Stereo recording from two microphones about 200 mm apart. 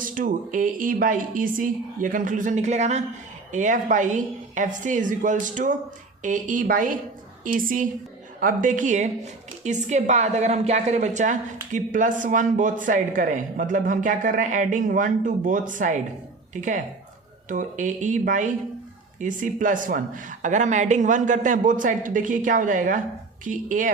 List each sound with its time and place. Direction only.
0.0 s a woman's voice: 40° right (ahead or behind)